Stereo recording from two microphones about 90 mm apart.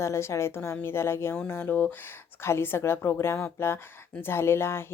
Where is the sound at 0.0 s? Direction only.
30° left (ahead or behind).